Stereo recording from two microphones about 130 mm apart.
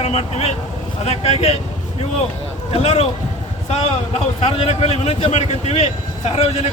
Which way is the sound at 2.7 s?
50° left (ahead or behind).